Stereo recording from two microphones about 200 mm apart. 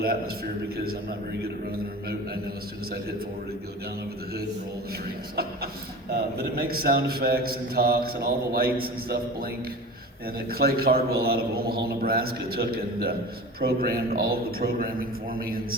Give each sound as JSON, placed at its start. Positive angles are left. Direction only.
{"t": 6.1, "sound": "speech", "side_deg": -50}